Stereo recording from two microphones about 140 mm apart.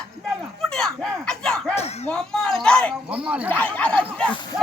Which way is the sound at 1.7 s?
50° left (ahead or behind).